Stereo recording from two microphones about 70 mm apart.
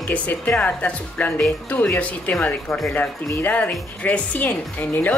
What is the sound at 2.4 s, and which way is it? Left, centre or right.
Speech, centre.